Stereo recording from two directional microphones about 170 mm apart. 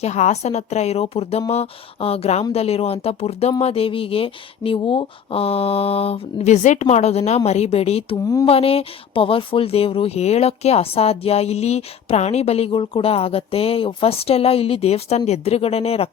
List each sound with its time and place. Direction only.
0.0 s speech: 40° left (ahead or behind)